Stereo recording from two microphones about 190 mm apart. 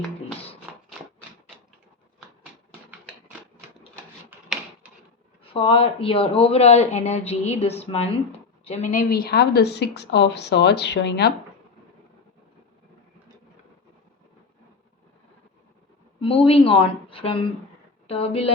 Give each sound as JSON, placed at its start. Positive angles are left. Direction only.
{"t": 0.7, "sound": "a sound", "side_deg": -5}
{"t": 4.3, "sound": "drawer open or close", "side_deg": -10}
{"t": 5.4, "sound": "a woman's voice", "side_deg": 30}
{"t": 16.2, "sound": "a woman's voice", "side_deg": 30}